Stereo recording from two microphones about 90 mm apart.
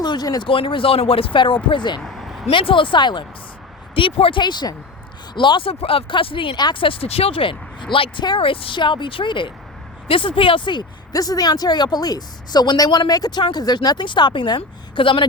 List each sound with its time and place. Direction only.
0.0 s speech: 50° left (ahead or behind)
0.4 s speech: 80° left
1.6 s a woman's voice: 60° left (ahead or behind)
2.0 s a sound: centre (ahead or behind)
2.5 s speech: 75° left (ahead or behind)
3.9 s speech: 75° left (ahead or behind)
6.6 s a woman's voice: 55° left (ahead or behind)
6.8 s speech: 85° left
8.4 s speech: 85° left; by 9.5 s 65° left (ahead or behind)
10.1 s speech: 75° left (ahead or behind)
11.1 s a woman's voice: 45° left (ahead or behind); by 15.3 s 70° left (ahead or behind)